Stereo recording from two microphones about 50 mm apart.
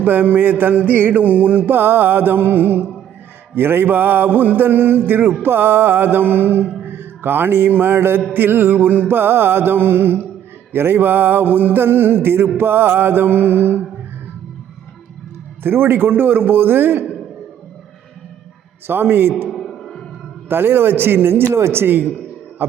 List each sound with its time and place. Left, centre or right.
0.0 s music: right
15.6 s music: right
18.9 s music: right
19.5 s music: centre
20.5 s music: right